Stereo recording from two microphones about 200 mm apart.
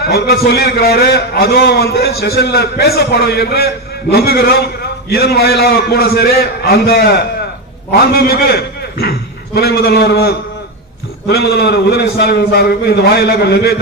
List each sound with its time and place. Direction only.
0.1 s a man's voice: 50° left (ahead or behind)